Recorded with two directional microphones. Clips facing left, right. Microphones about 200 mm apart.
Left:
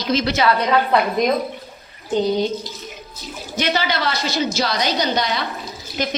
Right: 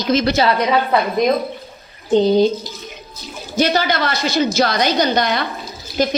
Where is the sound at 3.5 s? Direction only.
40° right (ahead or behind).